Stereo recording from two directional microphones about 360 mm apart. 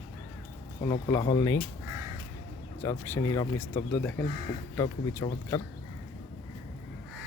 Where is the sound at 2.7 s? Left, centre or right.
Centre.